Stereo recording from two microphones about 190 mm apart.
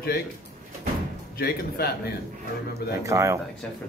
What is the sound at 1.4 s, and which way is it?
Speech, 55° left (ahead or behind).